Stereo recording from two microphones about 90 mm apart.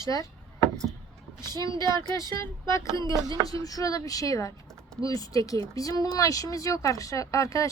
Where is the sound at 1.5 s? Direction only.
40° left (ahead or behind).